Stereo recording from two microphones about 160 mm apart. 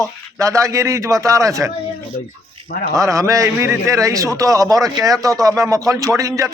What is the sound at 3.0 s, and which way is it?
A man's voice, 20° right (ahead or behind).